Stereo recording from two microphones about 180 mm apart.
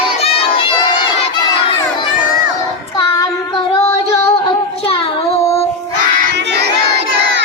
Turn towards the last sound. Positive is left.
turn(degrees=35)  # may be behind; listen again after turning